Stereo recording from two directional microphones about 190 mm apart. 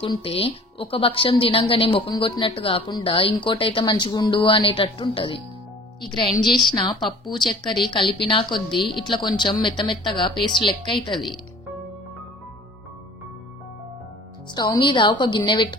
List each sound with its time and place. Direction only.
0.0 s a woman's voice: 30° left (ahead or behind)
14.5 s a woman's voice: 20° left (ahead or behind)